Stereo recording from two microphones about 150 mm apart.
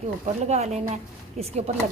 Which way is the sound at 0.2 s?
50° right (ahead or behind).